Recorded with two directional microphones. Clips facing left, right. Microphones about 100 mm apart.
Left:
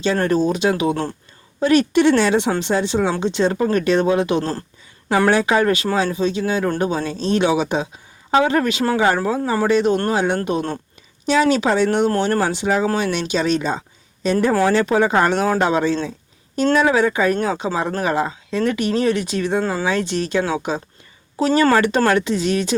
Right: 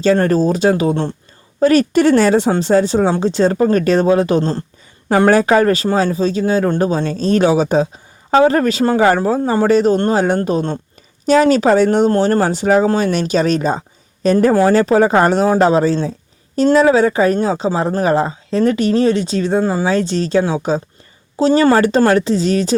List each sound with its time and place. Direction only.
0.0 s a woman's voice: 40° right (ahead or behind)